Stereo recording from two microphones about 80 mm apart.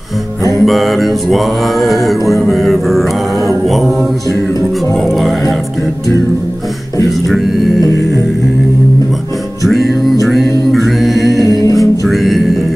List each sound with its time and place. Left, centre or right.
0.6 s mantra: centre
5.0 s a sound: centre
7.1 s speech: centre
10.2 s music: centre
10.7 s a capella: centre
11.6 s music: left
12.1 s music: centre